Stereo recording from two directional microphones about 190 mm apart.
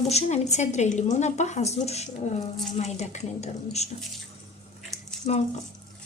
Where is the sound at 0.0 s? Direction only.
35° left (ahead or behind).